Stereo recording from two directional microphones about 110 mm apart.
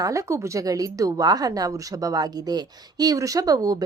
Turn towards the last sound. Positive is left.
turn(degrees=-35)  # may be behind; listen again after turning